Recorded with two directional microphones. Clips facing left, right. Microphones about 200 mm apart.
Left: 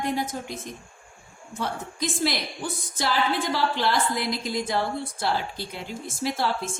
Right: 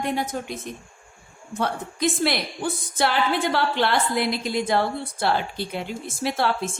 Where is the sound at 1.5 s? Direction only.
60° right (ahead or behind).